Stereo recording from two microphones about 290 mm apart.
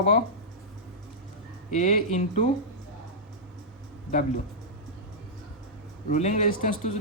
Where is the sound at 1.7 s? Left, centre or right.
Left.